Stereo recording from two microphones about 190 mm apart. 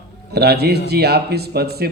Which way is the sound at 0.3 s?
60° right (ahead or behind).